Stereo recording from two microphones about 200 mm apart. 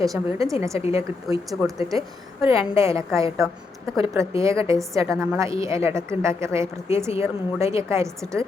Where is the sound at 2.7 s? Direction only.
15° right (ahead or behind).